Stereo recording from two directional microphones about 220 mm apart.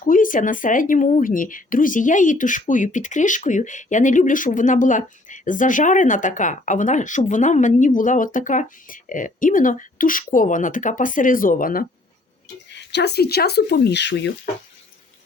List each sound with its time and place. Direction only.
0.0 s speech: 40° left (ahead or behind)
12.7 s speech: 50° left (ahead or behind)